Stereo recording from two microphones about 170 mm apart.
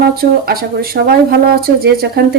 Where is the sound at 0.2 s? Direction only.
60° right (ahead or behind).